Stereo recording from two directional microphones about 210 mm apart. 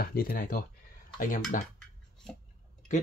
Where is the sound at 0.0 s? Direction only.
45° left (ahead or behind).